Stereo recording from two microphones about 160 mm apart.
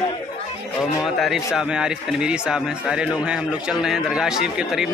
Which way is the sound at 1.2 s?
Centre (ahead or behind).